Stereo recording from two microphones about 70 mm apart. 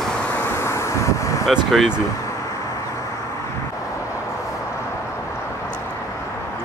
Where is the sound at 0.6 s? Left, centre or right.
Left.